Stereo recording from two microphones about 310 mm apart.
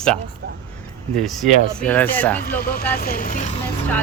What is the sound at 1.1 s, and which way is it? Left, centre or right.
Speech, centre.